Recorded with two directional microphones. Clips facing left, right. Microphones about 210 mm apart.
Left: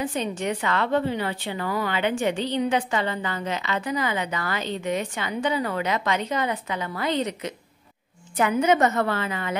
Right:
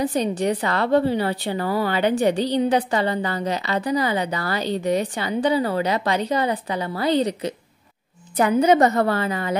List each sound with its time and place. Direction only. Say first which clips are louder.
0.0 s a woman's voice: right 5 dB; 40° right (ahead or behind)